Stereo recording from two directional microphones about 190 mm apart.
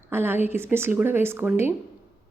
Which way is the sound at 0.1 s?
10° right (ahead or behind).